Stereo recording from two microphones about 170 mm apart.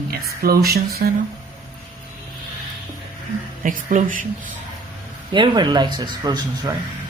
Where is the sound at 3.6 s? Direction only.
50° right (ahead or behind).